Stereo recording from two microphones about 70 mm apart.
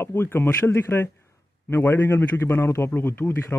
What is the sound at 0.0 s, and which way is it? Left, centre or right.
Speech, left.